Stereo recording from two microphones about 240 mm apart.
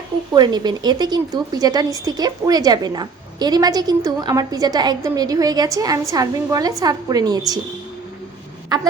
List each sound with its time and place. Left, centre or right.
0.3 s a woman's voice: centre
8.7 s a woman's voice: centre